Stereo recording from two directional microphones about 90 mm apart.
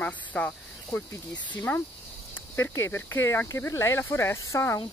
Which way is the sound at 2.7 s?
25° left (ahead or behind).